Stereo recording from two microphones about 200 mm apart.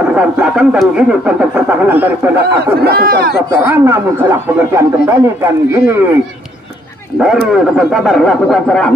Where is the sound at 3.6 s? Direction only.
10° right (ahead or behind).